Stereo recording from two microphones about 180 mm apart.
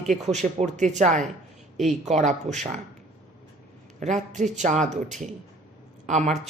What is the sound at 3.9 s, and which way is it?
A man's voice, 45° right (ahead or behind).